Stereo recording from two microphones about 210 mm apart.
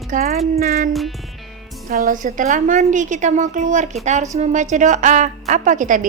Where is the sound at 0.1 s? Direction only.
45° right (ahead or behind).